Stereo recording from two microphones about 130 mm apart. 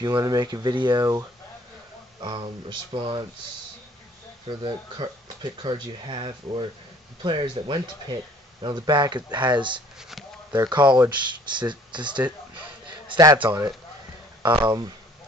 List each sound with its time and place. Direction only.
0.0 s speech: 30° right (ahead or behind)
4.5 s speech: 35° right (ahead or behind)
9.9 s speech: centre (ahead or behind)
10.5 s a man's voice: 35° right (ahead or behind)